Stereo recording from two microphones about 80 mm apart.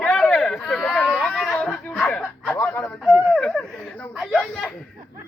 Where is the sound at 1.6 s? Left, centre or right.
Centre.